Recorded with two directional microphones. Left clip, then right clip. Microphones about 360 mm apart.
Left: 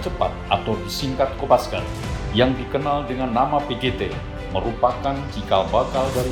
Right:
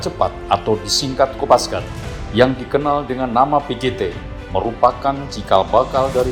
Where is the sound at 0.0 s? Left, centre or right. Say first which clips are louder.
Right 4 dB; centre.